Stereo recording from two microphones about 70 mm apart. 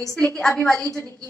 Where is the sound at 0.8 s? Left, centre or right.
Left.